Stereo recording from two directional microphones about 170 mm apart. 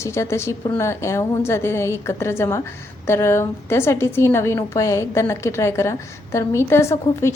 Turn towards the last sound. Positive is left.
turn(degrees=15)  # may be behind; listen again after turning